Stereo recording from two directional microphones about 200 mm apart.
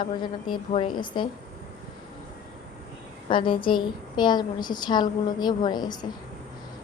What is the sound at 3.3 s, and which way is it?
A woman's voice, 25° left (ahead or behind).